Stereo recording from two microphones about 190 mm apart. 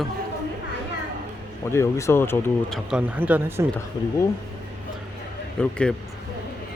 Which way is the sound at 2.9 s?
5° right (ahead or behind).